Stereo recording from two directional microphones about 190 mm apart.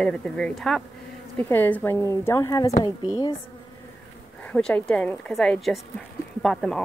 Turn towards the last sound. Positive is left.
turn(degrees=0)  # may be behind; listen again after turning